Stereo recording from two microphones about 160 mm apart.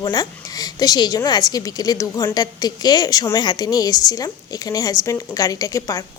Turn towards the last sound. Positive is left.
turn(degrees=20)  # may be behind; listen again after turning